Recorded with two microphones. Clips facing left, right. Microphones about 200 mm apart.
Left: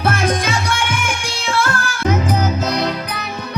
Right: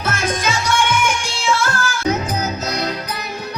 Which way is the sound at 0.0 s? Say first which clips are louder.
Left 3 dB; 60° left (ahead or behind).